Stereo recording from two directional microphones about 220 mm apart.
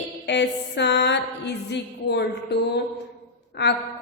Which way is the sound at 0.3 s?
50° left (ahead or behind).